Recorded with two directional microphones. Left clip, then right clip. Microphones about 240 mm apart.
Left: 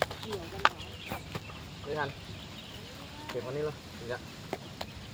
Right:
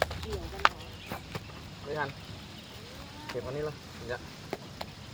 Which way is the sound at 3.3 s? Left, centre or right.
Centre.